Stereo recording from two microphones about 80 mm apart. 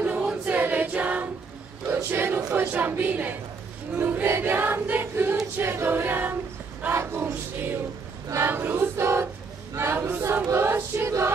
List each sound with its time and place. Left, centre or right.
0.0 s choir: centre
2.0 s a sound: right
3.9 s choir: centre
6.9 s a sound: right
7.2 s music: right
8.4 s choir: right
11.1 s choir: right